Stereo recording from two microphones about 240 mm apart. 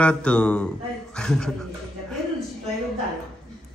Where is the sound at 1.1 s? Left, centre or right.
Centre.